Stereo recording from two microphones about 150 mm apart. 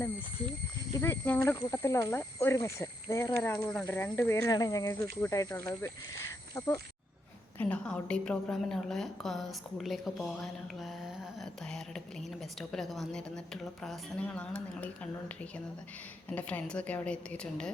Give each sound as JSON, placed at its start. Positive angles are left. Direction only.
{"t": 0.9, "sound": "a woman's voice", "side_deg": 15}
{"t": 3.7, "sound": "a woman's voice", "side_deg": 5}
{"t": 16.3, "sound": "a woman's voice", "side_deg": 10}